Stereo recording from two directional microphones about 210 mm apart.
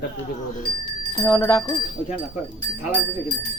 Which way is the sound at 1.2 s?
15° left (ahead or behind).